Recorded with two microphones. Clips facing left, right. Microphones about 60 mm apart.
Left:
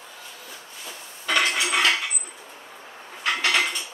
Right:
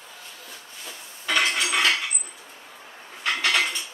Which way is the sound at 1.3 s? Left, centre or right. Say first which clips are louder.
Left 1 dB; centre.